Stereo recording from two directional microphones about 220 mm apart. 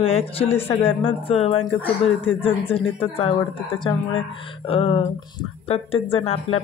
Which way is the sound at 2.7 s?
25° left (ahead or behind).